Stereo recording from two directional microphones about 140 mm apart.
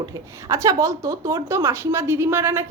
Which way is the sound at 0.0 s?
25° right (ahead or behind).